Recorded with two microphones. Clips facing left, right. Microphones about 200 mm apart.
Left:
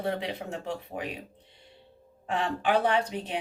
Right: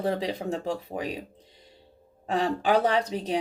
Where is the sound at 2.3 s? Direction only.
40° right (ahead or behind).